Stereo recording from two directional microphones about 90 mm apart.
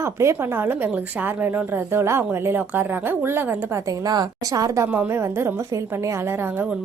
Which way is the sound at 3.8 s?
45° right (ahead or behind).